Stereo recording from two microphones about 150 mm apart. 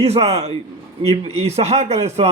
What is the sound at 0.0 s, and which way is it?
A man's voice, 40° right (ahead or behind).